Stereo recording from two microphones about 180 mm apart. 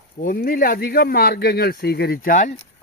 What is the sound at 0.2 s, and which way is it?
Speech, 50° left (ahead or behind).